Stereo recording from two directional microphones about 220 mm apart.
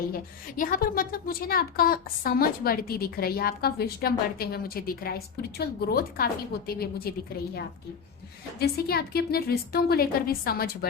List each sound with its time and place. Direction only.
0.1 s a woman's voice: 40° left (ahead or behind)